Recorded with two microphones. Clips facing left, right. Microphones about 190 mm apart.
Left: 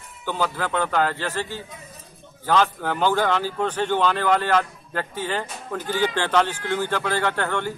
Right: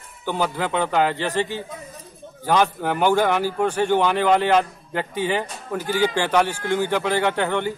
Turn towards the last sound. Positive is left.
turn(degrees=-15)  # may be behind; listen again after turning